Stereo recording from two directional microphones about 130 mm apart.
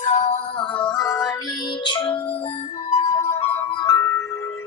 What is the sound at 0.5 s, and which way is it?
Music, 40° left (ahead or behind).